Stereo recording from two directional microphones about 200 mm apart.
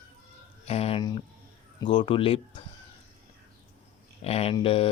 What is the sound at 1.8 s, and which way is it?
Speech, 25° left (ahead or behind).